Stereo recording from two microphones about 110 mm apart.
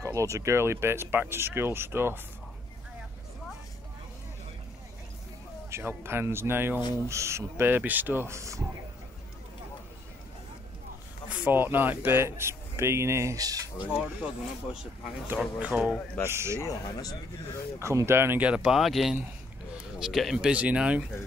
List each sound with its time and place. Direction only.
0.0 s speech: 30° right (ahead or behind)
5.7 s speech: 20° right (ahead or behind)
11.2 s speech: 15° right (ahead or behind); by 13.7 s 35° right (ahead or behind)
13.9 s speech: 5° right (ahead or behind)
16.3 s speech: 25° right (ahead or behind)
16.6 s speech: 30° left (ahead or behind)
17.7 s speech: 25° right (ahead or behind)